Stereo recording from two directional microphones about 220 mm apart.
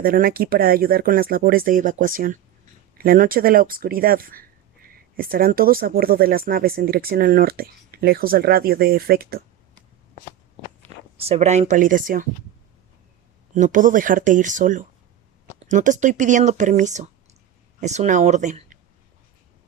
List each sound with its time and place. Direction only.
0.0 s speech: 40° right (ahead or behind)
11.2 s speech: 30° right (ahead or behind)
13.5 s speech: 35° right (ahead or behind)